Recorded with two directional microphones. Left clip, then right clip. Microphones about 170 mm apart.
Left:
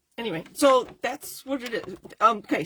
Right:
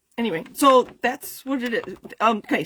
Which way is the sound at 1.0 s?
50° right (ahead or behind).